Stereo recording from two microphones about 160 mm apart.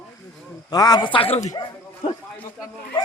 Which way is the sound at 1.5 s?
25° left (ahead or behind).